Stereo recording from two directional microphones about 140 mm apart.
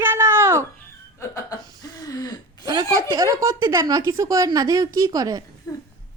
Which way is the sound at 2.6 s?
25° right (ahead or behind).